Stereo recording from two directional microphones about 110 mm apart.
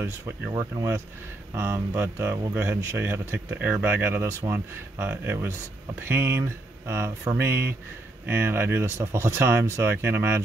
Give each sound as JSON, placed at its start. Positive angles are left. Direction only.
{"t": 0.5, "sound": "speech", "side_deg": -40}
{"t": 1.5, "sound": "speech", "side_deg": -25}